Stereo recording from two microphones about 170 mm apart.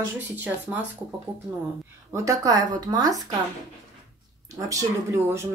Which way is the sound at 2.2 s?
20° right (ahead or behind).